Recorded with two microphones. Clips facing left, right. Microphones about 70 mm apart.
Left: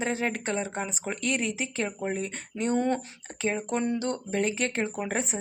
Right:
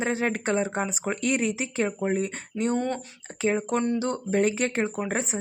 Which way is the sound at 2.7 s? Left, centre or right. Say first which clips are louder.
Left 5 dB; centre.